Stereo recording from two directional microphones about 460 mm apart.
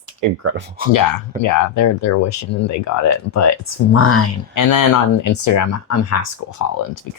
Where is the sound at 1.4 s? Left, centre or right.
Left.